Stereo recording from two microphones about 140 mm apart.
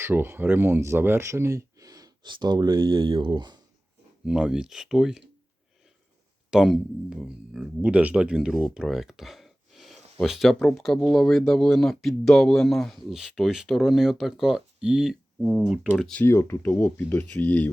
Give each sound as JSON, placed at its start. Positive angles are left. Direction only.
{"t": 0.0, "sound": "speech", "side_deg": -15}
{"t": 4.3, "sound": "speech", "side_deg": -5}
{"t": 6.5, "sound": "speech", "side_deg": 0}
{"t": 16.2, "sound": "speech", "side_deg": 15}